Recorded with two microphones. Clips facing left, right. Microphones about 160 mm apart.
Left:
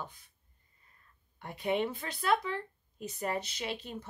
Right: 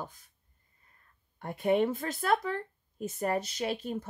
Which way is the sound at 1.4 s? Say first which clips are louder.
Right 5 dB; 45° right (ahead or behind).